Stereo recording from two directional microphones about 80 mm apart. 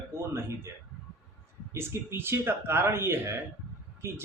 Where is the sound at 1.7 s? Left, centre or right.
Right.